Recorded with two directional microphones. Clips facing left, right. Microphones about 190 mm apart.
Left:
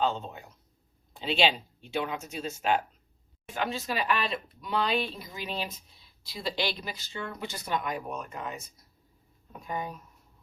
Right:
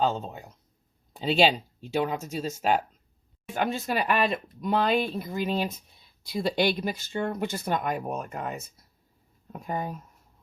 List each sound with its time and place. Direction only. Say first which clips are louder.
0.0 s speech: right 2 dB; 40° right (ahead or behind)